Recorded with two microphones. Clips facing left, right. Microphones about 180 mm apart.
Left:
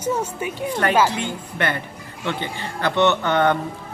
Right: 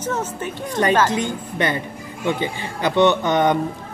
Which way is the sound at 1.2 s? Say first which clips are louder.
Right 2 dB; 15° right (ahead or behind).